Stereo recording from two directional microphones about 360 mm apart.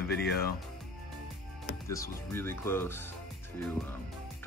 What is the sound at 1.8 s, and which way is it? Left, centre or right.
Speech, centre.